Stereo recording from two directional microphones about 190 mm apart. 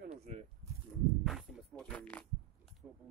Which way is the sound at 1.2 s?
Centre (ahead or behind).